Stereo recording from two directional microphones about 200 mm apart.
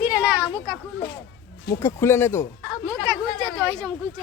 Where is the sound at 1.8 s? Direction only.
15° left (ahead or behind).